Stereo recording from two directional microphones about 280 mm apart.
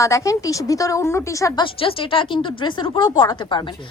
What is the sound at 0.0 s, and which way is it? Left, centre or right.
A woman's voice, centre.